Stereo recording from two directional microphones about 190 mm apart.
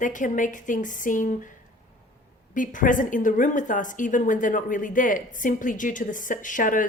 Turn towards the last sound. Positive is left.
turn(degrees=45)  # may be behind; listen again after turning